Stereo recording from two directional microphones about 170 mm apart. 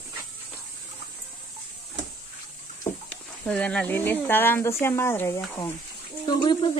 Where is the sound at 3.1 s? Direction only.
10° left (ahead or behind).